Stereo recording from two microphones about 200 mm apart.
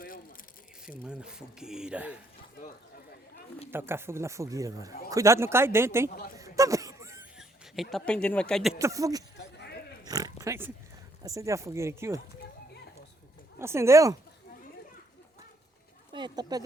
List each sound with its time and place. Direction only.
1.0 s speech: 5° right (ahead or behind)
3.7 s speech: 10° right (ahead or behind)
6.3 s a sound: 15° right (ahead or behind)
7.3 s speech: centre (ahead or behind)
8.8 s speech: 15° right (ahead or behind)
10.0 s pig: 20° right (ahead or behind)
11.2 s speech: 15° right (ahead or behind)
13.6 s speech: 15° right (ahead or behind)
16.1 s speech: 20° right (ahead or behind)